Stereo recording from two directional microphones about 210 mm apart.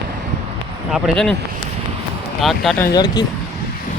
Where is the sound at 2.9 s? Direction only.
20° left (ahead or behind).